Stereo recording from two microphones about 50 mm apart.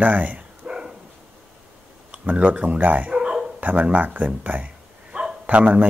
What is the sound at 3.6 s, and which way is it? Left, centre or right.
Speech, right.